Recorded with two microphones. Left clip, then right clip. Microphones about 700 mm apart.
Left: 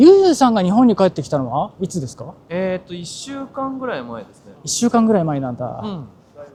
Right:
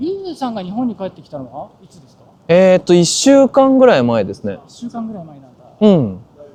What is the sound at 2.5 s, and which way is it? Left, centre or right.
Speech, right.